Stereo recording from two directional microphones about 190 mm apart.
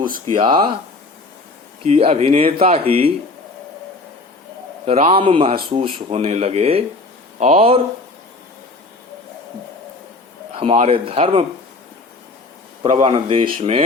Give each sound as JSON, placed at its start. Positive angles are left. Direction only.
{"t": 0.3, "sound": "speech", "side_deg": -25}
{"t": 1.8, "sound": "speech", "side_deg": -35}
{"t": 4.9, "sound": "speech", "side_deg": -35}
{"t": 10.6, "sound": "speech", "side_deg": -30}
{"t": 12.9, "sound": "speech", "side_deg": -35}